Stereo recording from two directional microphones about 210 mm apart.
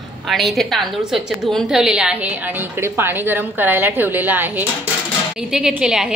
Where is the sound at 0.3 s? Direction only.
Centre (ahead or behind).